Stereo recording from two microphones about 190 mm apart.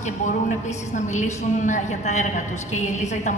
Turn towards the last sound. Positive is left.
turn(degrees=40)  # may be behind; listen again after turning